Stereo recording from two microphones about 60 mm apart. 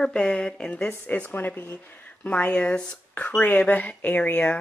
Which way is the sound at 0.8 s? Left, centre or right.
Left.